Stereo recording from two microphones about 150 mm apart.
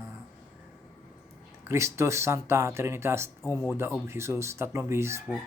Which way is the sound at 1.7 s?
20° right (ahead or behind).